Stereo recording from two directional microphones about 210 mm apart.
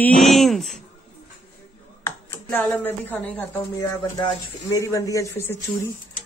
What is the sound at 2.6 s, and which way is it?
Speech, 10° left (ahead or behind).